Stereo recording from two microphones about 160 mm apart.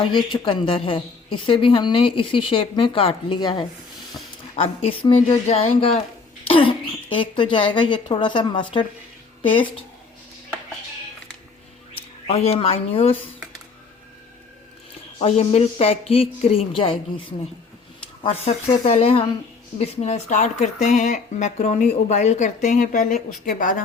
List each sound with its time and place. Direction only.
0.0 s a woman's voice: 30° left (ahead or behind)
11.9 s speech: 40° left (ahead or behind)
15.2 s a woman's voice: 40° left (ahead or behind)
18.2 s a woman's voice: 40° left (ahead or behind); by 23.8 s 60° left (ahead or behind)